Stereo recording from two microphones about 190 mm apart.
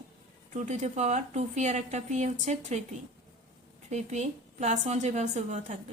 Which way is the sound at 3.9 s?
35° right (ahead or behind).